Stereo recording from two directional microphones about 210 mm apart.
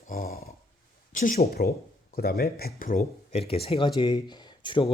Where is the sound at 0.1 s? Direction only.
45° left (ahead or behind).